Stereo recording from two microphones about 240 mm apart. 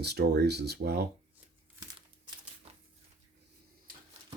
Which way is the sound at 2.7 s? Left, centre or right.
Right.